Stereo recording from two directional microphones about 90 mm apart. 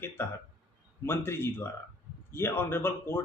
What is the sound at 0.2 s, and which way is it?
A man's voice, 25° left (ahead or behind).